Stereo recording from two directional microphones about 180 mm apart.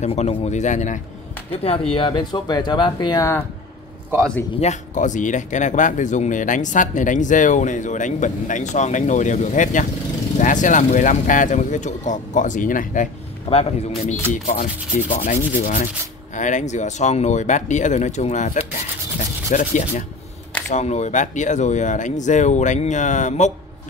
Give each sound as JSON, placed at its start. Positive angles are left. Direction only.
{"t": 0.0, "sound": "speech", "side_deg": 35}
{"t": 1.5, "sound": "speech", "side_deg": 30}
{"t": 4.6, "sound": "speech", "side_deg": 40}
{"t": 20.7, "sound": "speech", "side_deg": 40}